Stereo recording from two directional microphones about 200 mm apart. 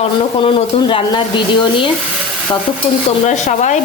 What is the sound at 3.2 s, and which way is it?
Speech, 35° left (ahead or behind).